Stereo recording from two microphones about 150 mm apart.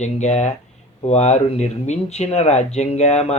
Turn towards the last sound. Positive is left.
turn(degrees=45)  # may be behind; listen again after turning